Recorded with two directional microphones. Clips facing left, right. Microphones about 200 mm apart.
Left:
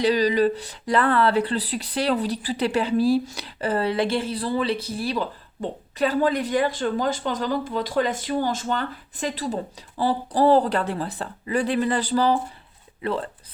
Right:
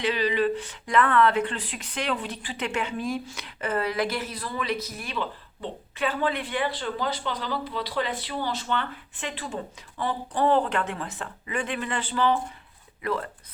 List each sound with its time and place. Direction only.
0.0 s speech: 40° left (ahead or behind)